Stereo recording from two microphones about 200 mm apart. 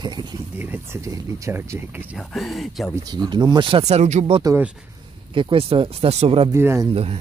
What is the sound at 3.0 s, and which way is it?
Speech, 20° right (ahead or behind).